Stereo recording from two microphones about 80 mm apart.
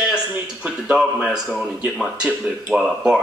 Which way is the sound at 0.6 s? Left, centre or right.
Centre.